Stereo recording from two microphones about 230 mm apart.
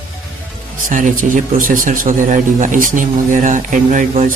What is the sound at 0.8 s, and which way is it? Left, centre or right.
Speech, right.